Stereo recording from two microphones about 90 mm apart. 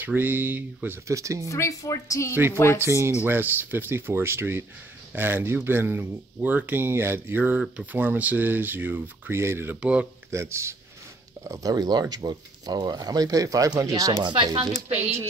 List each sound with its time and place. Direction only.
0.0 s speech: 20° right (ahead or behind)
1.0 s speech: 35° right (ahead or behind)
1.5 s speech: 40° left (ahead or behind)
2.3 s speech: 25° right (ahead or behind)
9.8 s speech: 15° right (ahead or behind)
10.3 s speech: 30° right (ahead or behind)
11.4 s speech: 40° right (ahead or behind)
14.2 s speech: 55° right (ahead or behind)